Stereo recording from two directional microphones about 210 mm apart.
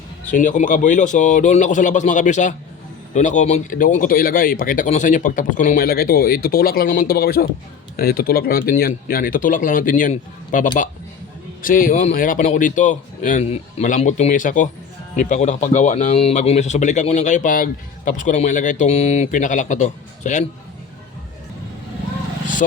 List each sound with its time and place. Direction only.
0.3 s speech: 35° left (ahead or behind)